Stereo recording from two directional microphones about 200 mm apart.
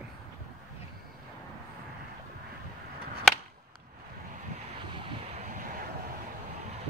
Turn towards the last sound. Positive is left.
turn(degrees=-40)  # may be behind; listen again after turning